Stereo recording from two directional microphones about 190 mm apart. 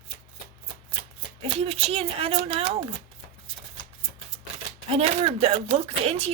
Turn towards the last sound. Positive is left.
turn(degrees=-30)  # may be behind; listen again after turning